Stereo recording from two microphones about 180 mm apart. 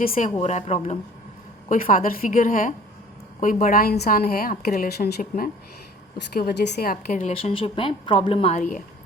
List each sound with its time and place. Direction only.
0.2 s a woman's voice: 40° left (ahead or behind)
1.7 s a woman's voice: 50° left (ahead or behind)
5.2 s a woman's voice: 45° left (ahead or behind)
6.3 s a woman's voice: 60° left (ahead or behind); by 8.8 s 40° left (ahead or behind)